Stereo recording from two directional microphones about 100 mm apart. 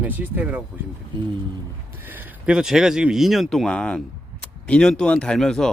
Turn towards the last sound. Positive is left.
turn(degrees=5)  # may be behind; listen again after turning